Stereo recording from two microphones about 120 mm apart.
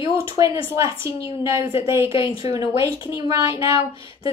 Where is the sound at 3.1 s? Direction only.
25° right (ahead or behind).